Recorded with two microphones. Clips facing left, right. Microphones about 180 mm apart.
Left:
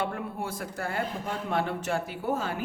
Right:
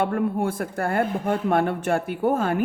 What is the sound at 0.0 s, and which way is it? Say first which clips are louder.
A man's voice: right 9 dB; 55° right (ahead or behind).